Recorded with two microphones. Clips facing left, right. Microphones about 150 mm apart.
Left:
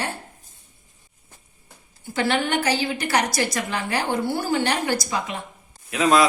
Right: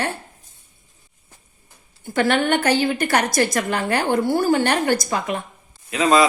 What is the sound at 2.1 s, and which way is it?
A woman's voice, 55° right (ahead or behind).